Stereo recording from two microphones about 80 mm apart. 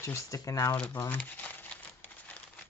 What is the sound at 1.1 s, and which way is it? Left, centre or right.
Crumpling, centre.